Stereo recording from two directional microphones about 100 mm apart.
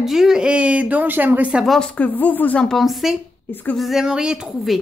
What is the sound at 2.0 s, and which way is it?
Speech, 15° left (ahead or behind).